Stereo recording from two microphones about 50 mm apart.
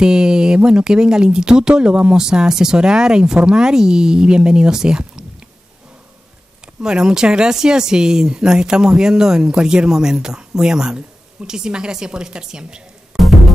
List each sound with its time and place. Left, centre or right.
0.0 s speech: centre
6.6 s speech: centre
13.1 s music: centre